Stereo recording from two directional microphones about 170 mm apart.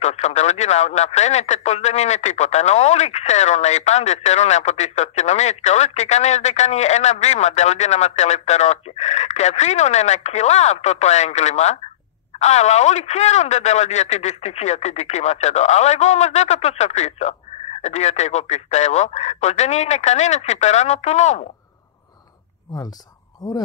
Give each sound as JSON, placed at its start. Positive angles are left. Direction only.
{"t": 0.0, "sound": "speech", "side_deg": 40}